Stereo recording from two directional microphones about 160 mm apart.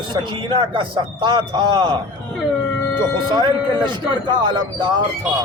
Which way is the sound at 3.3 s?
30° right (ahead or behind).